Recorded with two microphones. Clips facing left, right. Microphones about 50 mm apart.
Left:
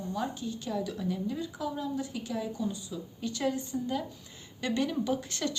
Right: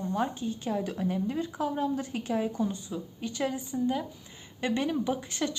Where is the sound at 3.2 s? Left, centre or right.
Right.